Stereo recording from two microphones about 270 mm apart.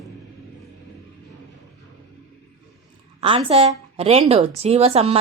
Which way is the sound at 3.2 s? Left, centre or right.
Centre.